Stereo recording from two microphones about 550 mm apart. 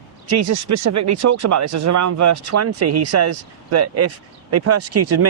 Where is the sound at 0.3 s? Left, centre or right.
Right.